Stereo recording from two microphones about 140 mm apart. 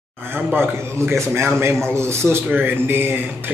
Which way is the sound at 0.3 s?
15° right (ahead or behind).